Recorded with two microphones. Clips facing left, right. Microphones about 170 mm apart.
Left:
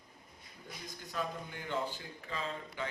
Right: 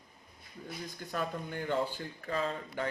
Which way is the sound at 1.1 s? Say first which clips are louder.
Right 3 dB; 50° right (ahead or behind).